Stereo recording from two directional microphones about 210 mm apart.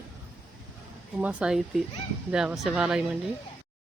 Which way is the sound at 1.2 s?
5° right (ahead or behind).